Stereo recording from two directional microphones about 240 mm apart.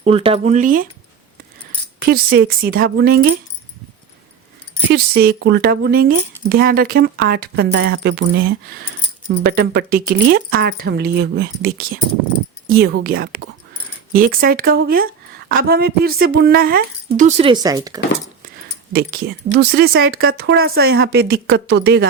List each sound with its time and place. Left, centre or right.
0.0 s speech: right
2.0 s speech: right
4.9 s speech: right; by 18.0 s centre
18.9 s speech: right